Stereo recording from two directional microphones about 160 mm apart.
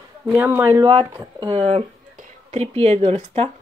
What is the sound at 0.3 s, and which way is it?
Speech, 10° right (ahead or behind).